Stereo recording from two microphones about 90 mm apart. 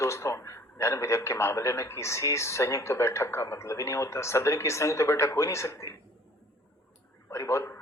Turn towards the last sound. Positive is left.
turn(degrees=30)  # may be behind; listen again after turning